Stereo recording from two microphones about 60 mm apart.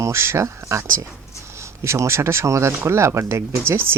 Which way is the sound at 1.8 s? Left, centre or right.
Right.